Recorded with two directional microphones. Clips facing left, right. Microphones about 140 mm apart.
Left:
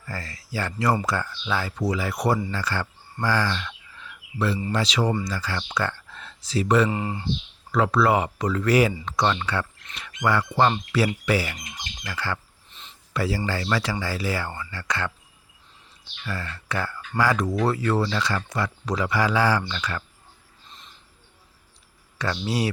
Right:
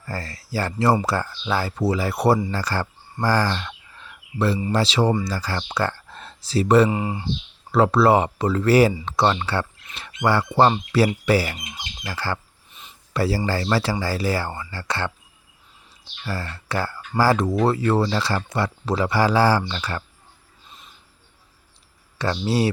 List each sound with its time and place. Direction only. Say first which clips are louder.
0.0 s speech: right 4 dB; 35° right (ahead or behind)
6.9 s speech: right 3 dB; 20° right (ahead or behind)
7.7 s speech: right 4 dB; 30° right (ahead or behind)
12.7 s a sound: right 1 dB; 15° right (ahead or behind)
13.1 s speech: right 4 dB; 35° right (ahead or behind)
16.2 s speech: right 3 dB; 35° right (ahead or behind)
20.7 s bird: right 1 dB; 10° right (ahead or behind)
22.2 s speech: right 4 dB; 30° right (ahead or behind)